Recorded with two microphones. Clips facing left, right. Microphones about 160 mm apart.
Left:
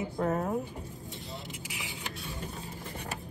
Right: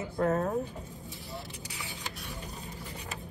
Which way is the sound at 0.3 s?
15° left (ahead or behind).